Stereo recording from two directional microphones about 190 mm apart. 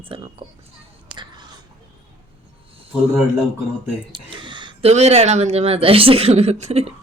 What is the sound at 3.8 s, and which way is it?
Speech, 25° right (ahead or behind).